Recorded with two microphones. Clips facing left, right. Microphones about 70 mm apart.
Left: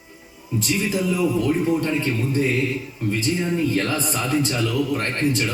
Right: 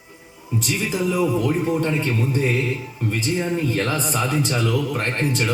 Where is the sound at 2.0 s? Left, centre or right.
Right.